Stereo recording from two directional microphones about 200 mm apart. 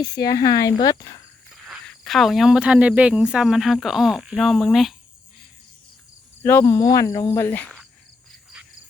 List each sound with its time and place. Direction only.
0.3 s speech: 20° left (ahead or behind)
1.5 s speech: centre (ahead or behind)
6.4 s speech: 10° left (ahead or behind)